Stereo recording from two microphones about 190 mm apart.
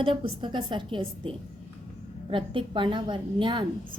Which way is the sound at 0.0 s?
25° right (ahead or behind).